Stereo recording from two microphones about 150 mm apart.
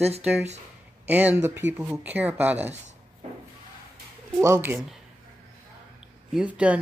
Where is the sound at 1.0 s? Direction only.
10° right (ahead or behind).